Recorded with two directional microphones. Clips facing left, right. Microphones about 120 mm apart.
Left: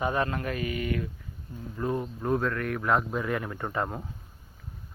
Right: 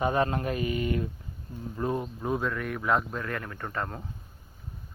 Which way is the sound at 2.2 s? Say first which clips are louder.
Left 4 dB; 5° right (ahead or behind).